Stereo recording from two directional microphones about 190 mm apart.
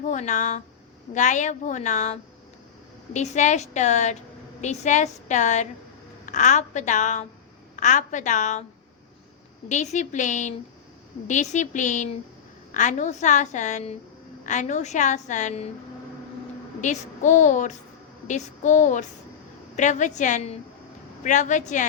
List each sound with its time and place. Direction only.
0.1 s a woman's voice: 40° left (ahead or behind)
9.6 s a woman's voice: 40° left (ahead or behind)
16.8 s a woman's voice: 40° left (ahead or behind)